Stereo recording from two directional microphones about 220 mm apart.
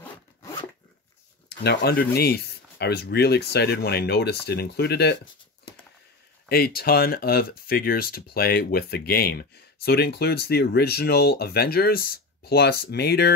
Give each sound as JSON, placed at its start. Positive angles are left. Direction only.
{"t": 1.6, "sound": "speech", "side_deg": 45}
{"t": 6.5, "sound": "speech", "side_deg": 45}